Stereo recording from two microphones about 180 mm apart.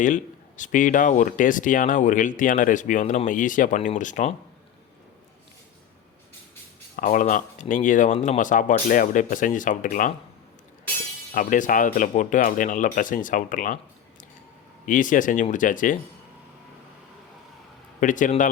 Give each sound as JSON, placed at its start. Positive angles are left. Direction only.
{"t": 0.0, "sound": "speech", "side_deg": 45}
{"t": 6.9, "sound": "speech", "side_deg": 45}
{"t": 11.3, "sound": "speech", "side_deg": 45}
{"t": 14.8, "sound": "speech", "side_deg": 45}
{"t": 18.0, "sound": "speech", "side_deg": 45}